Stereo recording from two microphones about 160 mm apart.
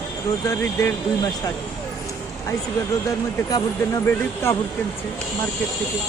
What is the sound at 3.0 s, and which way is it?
Speech, 20° left (ahead or behind).